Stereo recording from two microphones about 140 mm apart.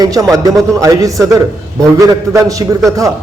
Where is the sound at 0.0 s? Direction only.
25° right (ahead or behind).